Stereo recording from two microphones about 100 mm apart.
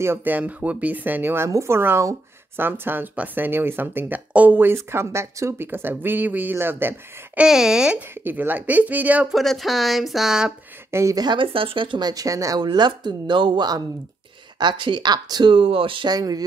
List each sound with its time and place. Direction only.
0.0 s speech: 20° right (ahead or behind)
7.4 s speech: 5° right (ahead or behind)
8.1 s speech: 20° right (ahead or behind)
9.3 s speech: centre (ahead or behind)
10.9 s speech: 25° right (ahead or behind)
11.1 s speech: 50° right (ahead or behind)
12.0 s speech: 40° right (ahead or behind)
12.6 s speech: 50° right (ahead or behind)
15.5 s speech: 65° right (ahead or behind)
16.1 s speech: 40° right (ahead or behind)